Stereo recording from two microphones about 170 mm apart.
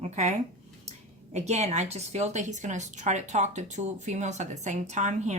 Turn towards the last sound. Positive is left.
turn(degrees=-45)  # may be behind; listen again after turning